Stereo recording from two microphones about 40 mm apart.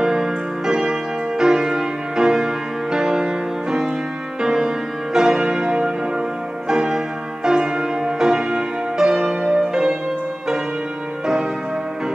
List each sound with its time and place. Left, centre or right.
0.0 s music: centre